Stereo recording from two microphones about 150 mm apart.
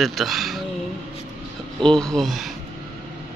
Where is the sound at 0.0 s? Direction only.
Centre (ahead or behind).